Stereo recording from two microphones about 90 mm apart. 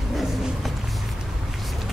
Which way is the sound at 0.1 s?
Centre (ahead or behind).